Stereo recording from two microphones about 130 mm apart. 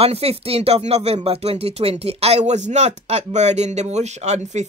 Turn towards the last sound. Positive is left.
turn(degrees=-60)  # may be behind; listen again after turning